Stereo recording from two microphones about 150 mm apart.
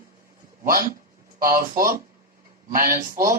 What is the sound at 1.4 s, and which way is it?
A man's voice, 70° right (ahead or behind).